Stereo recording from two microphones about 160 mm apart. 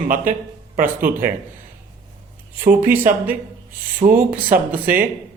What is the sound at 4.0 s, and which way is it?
Speech, 60° right (ahead or behind).